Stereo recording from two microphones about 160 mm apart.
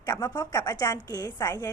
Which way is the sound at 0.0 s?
25° left (ahead or behind).